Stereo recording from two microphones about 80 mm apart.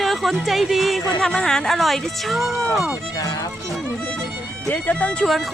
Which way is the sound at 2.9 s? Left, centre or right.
Left.